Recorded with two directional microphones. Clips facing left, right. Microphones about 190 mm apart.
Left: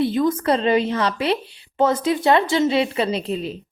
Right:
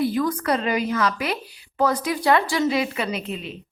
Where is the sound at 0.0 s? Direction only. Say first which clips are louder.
Left 3 dB; 25° left (ahead or behind).